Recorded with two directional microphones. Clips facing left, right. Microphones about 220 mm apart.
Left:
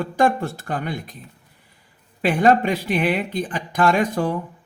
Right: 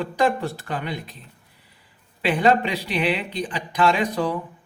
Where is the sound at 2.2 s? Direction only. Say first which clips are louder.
Left 2 dB; 45° left (ahead or behind).